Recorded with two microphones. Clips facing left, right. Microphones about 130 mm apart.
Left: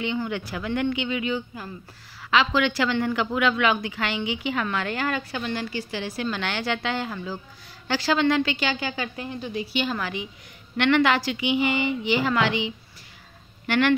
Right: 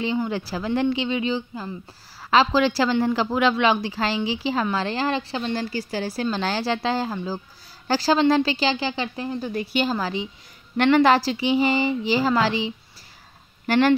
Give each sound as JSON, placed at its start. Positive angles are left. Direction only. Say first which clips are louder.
{"t": 0.0, "sound": "a woman's voice", "louder": "right 3 dB", "side_deg": -35}
{"t": 9.5, "sound": "a woman's voice", "louder": "right 2 dB", "side_deg": -50}
{"t": 9.8, "sound": "a woman's voice", "louder": "right 4 dB", "side_deg": -35}